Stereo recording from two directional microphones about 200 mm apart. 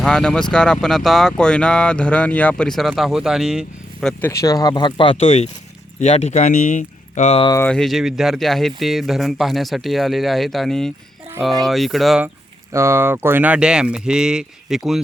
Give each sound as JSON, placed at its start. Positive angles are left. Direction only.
{"t": 0.0, "sound": "speech", "side_deg": 5}
{"t": 4.2, "sound": "speech", "side_deg": 15}
{"t": 7.5, "sound": "speech", "side_deg": 5}
{"t": 12.7, "sound": "speech", "side_deg": -15}